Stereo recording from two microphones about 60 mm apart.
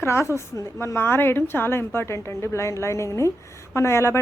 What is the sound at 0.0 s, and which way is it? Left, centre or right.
Speech, left.